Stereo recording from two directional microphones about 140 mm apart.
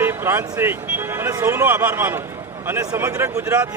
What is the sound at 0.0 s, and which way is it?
A man's voice, 15° right (ahead or behind).